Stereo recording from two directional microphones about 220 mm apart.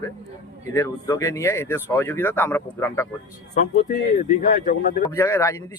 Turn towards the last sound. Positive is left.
turn(degrees=15)  # may be behind; listen again after turning